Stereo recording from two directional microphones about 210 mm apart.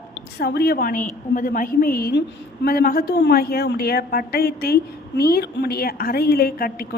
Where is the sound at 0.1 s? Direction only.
50° left (ahead or behind).